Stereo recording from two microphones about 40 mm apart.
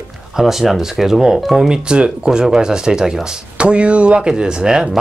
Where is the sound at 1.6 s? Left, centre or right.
Right.